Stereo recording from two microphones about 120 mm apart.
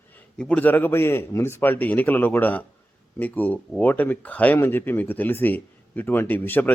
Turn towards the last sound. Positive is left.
turn(degrees=15)  # may be behind; listen again after turning